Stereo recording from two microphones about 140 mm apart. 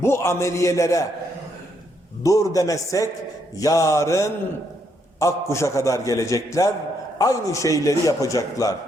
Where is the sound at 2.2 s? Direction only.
25° left (ahead or behind).